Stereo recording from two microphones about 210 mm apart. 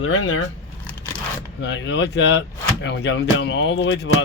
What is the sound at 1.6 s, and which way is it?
Speech, 60° left (ahead or behind).